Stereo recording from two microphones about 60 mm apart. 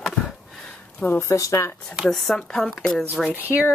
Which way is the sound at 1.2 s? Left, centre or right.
Left.